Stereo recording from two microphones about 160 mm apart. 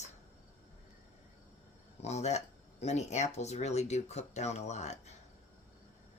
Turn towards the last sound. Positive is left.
turn(degrees=45)  # may be behind; listen again after turning